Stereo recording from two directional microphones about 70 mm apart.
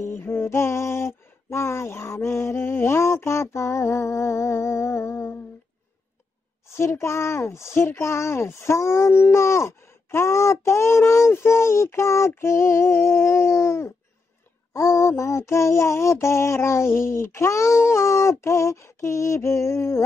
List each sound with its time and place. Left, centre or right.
0.2 s speech: left
6.8 s speech: left